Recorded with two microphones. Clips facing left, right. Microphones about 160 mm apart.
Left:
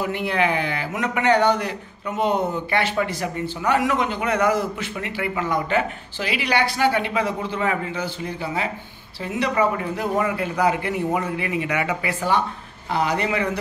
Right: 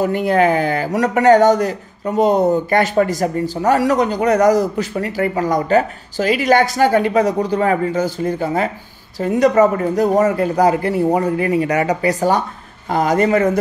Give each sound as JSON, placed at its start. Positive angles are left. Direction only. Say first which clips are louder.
{"t": 0.0, "sound": "a man's voice", "louder": "right 8 dB", "side_deg": -40}